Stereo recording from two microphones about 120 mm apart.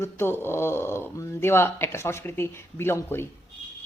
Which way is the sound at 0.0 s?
20° left (ahead or behind).